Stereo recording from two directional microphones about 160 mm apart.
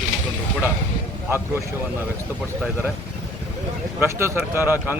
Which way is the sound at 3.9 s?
15° right (ahead or behind).